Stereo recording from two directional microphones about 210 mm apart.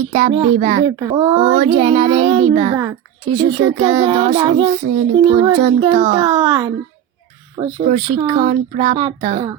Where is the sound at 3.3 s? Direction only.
25° right (ahead or behind).